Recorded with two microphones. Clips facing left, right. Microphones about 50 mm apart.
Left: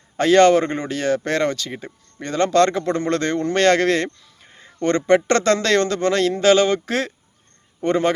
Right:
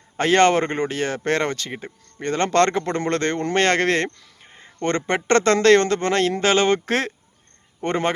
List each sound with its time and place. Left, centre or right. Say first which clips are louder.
0.2 s speech: left 3 dB; right
4.4 s speech: left 3 dB; right
6.8 s speech: even; right
7.8 s a man's voice: left 4 dB; right